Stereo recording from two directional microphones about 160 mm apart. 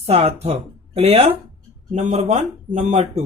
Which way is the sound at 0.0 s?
40° right (ahead or behind).